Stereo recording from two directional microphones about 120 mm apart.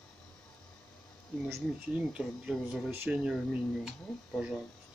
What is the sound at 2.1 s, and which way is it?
Speech, 5° right (ahead or behind).